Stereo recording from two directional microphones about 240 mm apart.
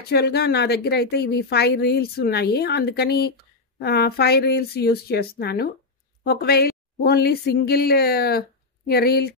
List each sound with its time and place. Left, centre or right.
0.1 s a woman's voice: left